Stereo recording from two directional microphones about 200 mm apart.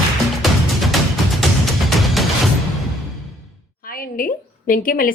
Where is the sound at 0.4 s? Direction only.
Centre (ahead or behind).